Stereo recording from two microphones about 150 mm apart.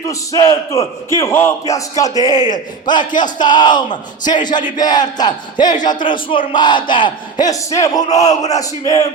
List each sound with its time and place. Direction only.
0.1 s speech: 20° left (ahead or behind)